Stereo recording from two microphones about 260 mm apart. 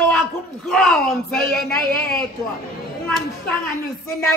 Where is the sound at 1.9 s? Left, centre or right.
Left.